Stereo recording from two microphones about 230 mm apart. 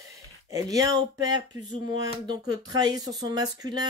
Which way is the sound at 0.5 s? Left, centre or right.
Centre.